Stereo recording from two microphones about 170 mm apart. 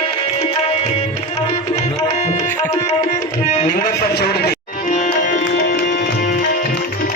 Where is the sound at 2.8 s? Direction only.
40° left (ahead or behind).